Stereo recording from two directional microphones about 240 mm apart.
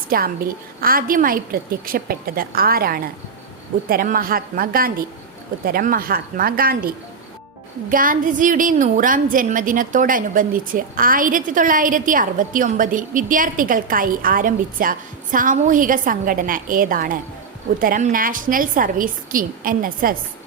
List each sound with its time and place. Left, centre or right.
0.1 s a woman's voice: right